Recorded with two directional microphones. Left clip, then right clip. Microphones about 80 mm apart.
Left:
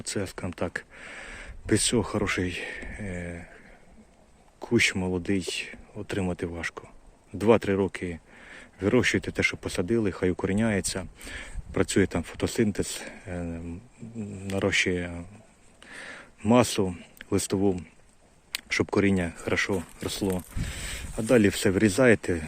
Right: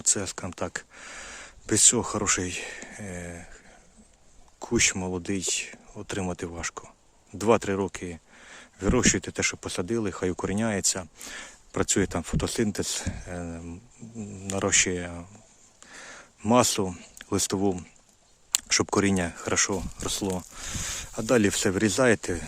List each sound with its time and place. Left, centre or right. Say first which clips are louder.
0.0 s speech: right 3 dB; right
4.6 s speech: left 1 dB; right
15.8 s a sound: left 3 dB; right
16.5 s speech: even; right
18.5 s speech: right 1 dB; right